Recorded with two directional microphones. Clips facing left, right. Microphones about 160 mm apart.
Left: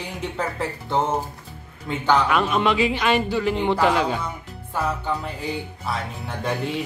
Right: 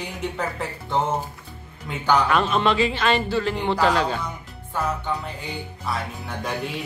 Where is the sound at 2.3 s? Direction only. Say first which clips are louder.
Even; 10° left (ahead or behind).